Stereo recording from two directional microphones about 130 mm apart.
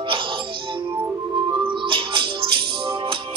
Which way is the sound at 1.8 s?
40° right (ahead or behind).